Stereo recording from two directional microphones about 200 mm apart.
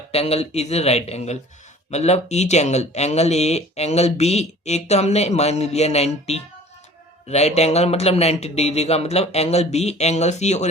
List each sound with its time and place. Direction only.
0.1 s speech: 30° left (ahead or behind)